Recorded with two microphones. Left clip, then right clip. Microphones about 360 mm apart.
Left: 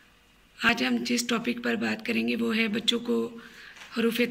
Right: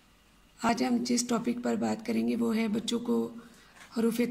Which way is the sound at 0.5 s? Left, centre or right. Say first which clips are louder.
Left 4 dB; centre.